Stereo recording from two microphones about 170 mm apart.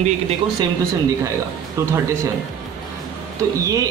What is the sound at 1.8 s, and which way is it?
Speech, 15° right (ahead or behind).